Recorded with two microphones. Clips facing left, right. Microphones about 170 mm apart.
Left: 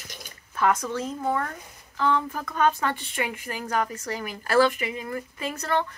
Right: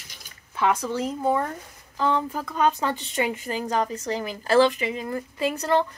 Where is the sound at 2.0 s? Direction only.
30° right (ahead or behind).